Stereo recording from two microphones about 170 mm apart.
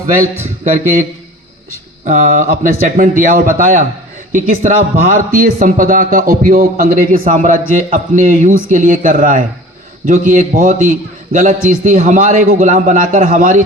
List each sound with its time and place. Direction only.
2.0 s speech: 55° right (ahead or behind)